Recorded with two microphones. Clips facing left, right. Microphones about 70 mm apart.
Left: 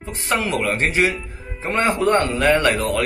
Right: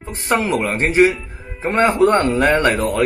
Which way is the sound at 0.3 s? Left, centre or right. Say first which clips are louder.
Right 3 dB; right.